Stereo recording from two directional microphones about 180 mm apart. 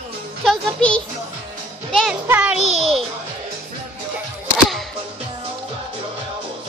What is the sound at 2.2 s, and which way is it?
Music, 10° right (ahead or behind).